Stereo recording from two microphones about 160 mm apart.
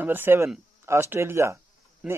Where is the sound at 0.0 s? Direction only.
10° right (ahead or behind).